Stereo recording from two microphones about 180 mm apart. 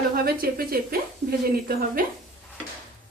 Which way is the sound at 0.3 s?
55° right (ahead or behind).